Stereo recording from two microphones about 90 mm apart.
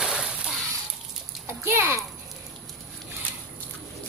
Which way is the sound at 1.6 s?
30° right (ahead or behind).